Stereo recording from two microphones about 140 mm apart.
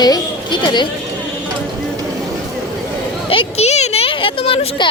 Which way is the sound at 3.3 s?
45° left (ahead or behind).